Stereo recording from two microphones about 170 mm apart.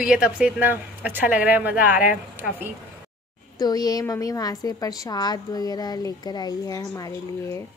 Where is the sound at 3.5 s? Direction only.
20° left (ahead or behind).